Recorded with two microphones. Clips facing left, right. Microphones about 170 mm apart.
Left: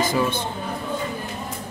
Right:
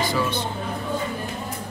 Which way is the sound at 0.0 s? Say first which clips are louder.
Left 2 dB; 45° left (ahead or behind).